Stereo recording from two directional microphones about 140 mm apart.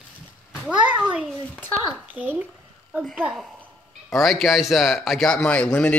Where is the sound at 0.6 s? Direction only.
10° right (ahead or behind).